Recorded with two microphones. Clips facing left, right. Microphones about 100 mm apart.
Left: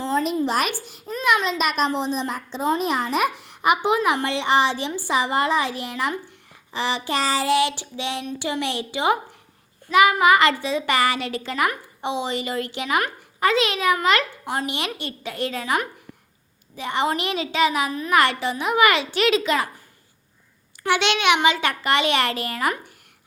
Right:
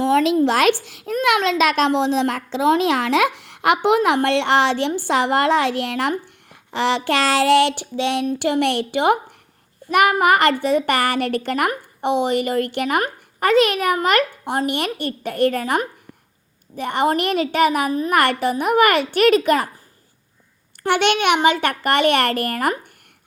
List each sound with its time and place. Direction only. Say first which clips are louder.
0.0 s a child's voice: right 7 dB; 85° right; by 18.2 s 40° right (ahead or behind)
18.2 s a woman's voice: right 1 dB; 55° right (ahead or behind)
20.7 s a woman's voice: right 4 dB; 55° right (ahead or behind)